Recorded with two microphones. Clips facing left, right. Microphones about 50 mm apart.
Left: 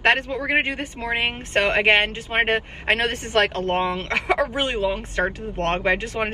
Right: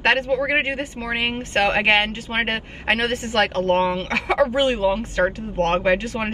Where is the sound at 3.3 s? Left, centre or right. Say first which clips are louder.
Right 2 dB; left.